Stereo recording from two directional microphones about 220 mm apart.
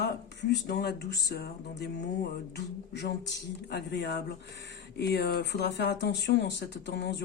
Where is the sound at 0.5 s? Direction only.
50° left (ahead or behind).